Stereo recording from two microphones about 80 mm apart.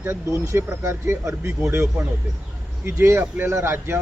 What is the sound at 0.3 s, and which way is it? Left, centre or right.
Speech, right.